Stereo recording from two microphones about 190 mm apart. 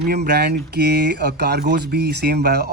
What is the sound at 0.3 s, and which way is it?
Speech, 55° right (ahead or behind).